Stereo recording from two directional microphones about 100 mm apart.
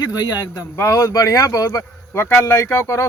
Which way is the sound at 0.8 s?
30° left (ahead or behind).